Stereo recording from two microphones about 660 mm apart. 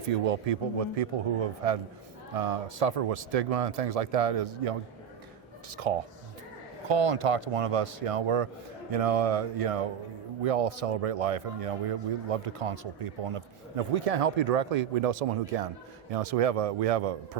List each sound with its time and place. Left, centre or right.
0.3 s speech: right